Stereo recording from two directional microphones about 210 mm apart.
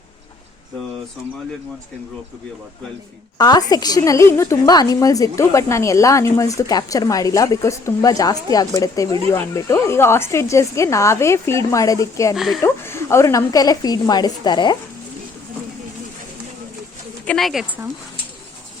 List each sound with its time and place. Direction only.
3.3 s a woman's voice: 20° left (ahead or behind)
17.2 s speech: centre (ahead or behind)